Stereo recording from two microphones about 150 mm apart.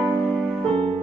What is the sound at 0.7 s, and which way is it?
Music, 35° right (ahead or behind).